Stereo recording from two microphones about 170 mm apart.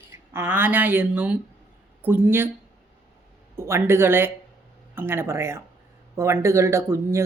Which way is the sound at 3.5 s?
15° right (ahead or behind).